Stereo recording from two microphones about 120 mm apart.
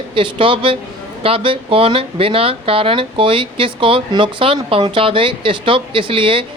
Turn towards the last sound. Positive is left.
turn(degrees=-45)  # may be behind; listen again after turning